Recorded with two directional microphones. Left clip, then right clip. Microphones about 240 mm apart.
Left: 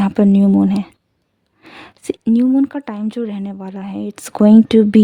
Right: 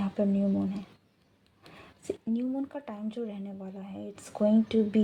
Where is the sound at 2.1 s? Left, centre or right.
Left.